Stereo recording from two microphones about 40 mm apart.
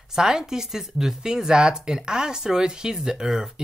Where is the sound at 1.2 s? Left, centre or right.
Centre.